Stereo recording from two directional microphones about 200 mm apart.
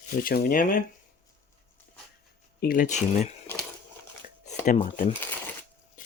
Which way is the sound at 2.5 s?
45° left (ahead or behind).